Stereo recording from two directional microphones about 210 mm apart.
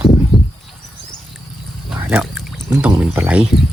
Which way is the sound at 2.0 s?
5° right (ahead or behind).